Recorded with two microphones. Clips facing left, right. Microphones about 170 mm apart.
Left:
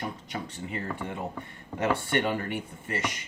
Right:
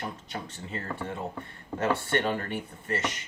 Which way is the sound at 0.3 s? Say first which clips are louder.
Left 2 dB; 15° left (ahead or behind).